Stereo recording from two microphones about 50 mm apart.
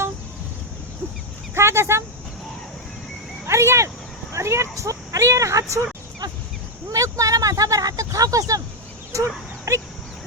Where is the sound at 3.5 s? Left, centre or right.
Right.